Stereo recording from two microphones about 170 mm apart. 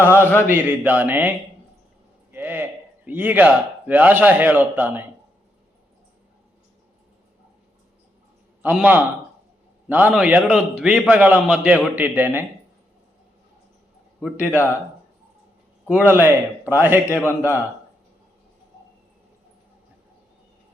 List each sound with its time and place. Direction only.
0.2 s a man's voice: 15° left (ahead or behind)
0.4 s a man's voice: 10° right (ahead or behind)
2.3 s a man's voice: 10° right (ahead or behind)
8.6 s a man's voice: 10° right (ahead or behind)
14.4 s a man's voice: 15° left (ahead or behind)
15.9 s a man's voice: 10° right (ahead or behind)
17.1 s a man's voice: 15° left (ahead or behind)